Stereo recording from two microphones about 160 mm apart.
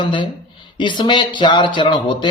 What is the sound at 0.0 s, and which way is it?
A man's voice, 30° left (ahead or behind).